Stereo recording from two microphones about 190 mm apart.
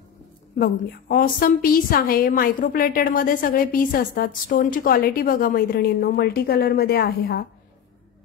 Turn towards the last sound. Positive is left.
turn(degrees=55)  # may be behind; listen again after turning